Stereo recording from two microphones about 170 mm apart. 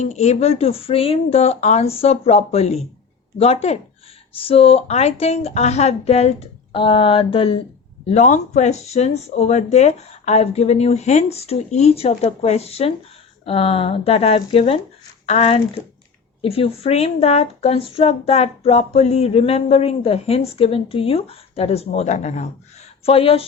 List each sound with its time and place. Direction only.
0.0 s speech: 40° left (ahead or behind)
8.0 s speech: 45° left (ahead or behind)